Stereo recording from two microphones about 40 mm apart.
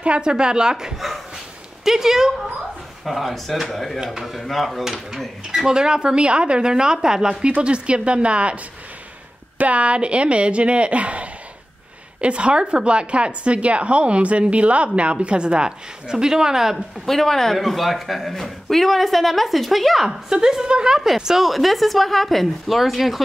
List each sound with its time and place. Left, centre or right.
0.0 s a woman's voice: right
3.1 s a woman's voice: centre
4.0 s a woman's voice: centre
4.8 s a woman's voice: centre
7.6 s a woman's voice: right
9.6 s a woman's voice: right; by 16.8 s centre
17.0 s a woman's voice: centre
20.1 s a woman's voice: centre
21.5 s a woman's voice: centre